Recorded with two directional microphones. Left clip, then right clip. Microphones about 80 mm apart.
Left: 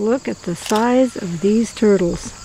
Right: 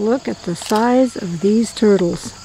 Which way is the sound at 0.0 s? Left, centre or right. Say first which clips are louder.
Right 1 dB; centre.